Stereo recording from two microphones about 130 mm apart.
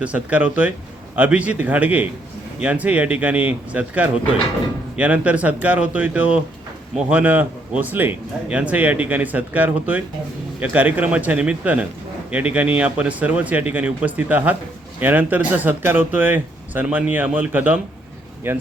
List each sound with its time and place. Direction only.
0.0 s speech: 10° right (ahead or behind)